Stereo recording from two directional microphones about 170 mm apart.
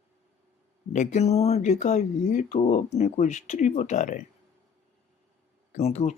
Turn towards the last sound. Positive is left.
turn(degrees=40)  # may be behind; listen again after turning